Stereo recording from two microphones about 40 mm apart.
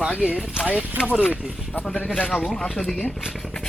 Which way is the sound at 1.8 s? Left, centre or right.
Left.